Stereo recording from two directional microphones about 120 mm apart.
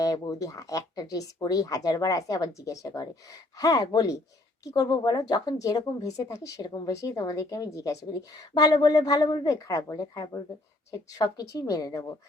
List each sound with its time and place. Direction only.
0.0 s speech: 30° left (ahead or behind)